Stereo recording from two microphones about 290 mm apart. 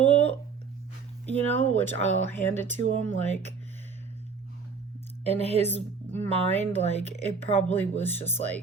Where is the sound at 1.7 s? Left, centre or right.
Right.